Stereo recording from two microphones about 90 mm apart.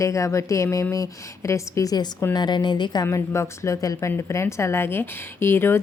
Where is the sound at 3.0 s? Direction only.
30° left (ahead or behind).